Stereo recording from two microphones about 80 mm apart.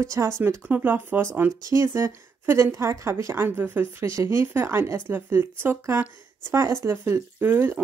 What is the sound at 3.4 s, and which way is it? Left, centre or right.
Speech, right.